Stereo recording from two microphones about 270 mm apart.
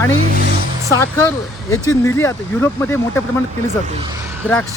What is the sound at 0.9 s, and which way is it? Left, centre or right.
Speech, centre.